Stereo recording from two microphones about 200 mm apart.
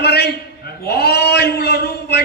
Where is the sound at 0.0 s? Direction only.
55° left (ahead or behind).